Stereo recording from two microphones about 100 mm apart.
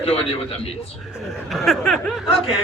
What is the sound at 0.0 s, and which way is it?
Speech, 85° left.